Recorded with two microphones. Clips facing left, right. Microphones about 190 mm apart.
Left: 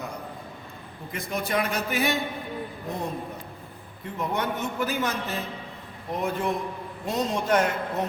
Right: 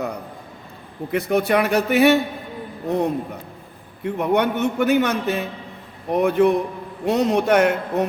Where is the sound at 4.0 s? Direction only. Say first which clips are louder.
Right 9 dB; 65° right (ahead or behind).